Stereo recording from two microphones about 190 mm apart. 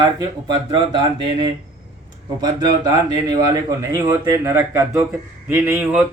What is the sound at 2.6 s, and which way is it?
A man's voice, 20° right (ahead or behind).